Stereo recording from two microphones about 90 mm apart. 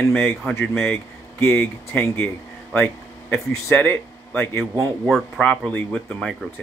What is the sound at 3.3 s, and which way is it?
A man's voice, 25° left (ahead or behind).